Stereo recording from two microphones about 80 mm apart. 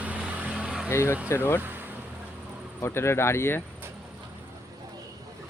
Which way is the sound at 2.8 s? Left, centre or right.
Left.